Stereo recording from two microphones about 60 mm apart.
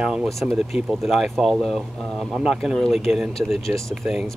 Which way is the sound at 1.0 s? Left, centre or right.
Centre.